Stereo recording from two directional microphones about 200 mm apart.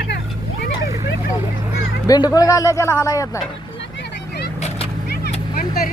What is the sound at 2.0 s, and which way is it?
Speech, 20° left (ahead or behind).